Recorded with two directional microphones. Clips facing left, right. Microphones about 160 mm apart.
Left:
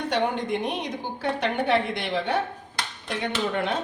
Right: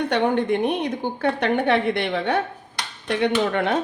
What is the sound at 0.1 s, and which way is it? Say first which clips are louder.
A woman's voice: right 3 dB; 60° right (ahead or behind).